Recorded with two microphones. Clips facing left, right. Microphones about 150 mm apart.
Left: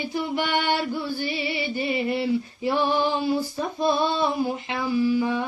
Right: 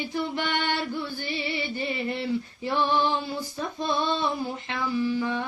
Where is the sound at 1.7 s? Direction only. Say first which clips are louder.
Left 5 dB; 15° left (ahead or behind).